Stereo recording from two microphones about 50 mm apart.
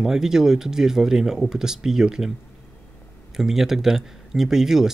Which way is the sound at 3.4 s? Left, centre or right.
Centre.